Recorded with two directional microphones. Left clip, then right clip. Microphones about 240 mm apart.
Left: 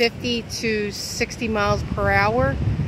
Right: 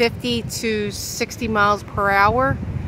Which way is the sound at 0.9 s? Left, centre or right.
Right.